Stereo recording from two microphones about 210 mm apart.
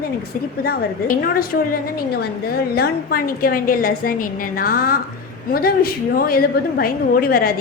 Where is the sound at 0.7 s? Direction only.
45° left (ahead or behind).